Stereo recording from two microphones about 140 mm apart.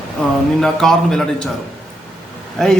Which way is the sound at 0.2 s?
5° left (ahead or behind).